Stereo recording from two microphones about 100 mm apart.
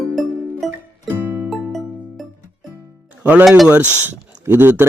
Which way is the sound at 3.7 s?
15° right (ahead or behind).